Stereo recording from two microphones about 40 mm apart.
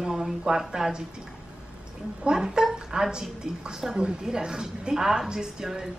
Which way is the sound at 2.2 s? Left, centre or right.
Centre.